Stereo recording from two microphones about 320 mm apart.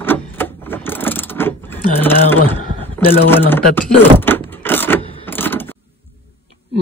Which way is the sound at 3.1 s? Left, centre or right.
Centre.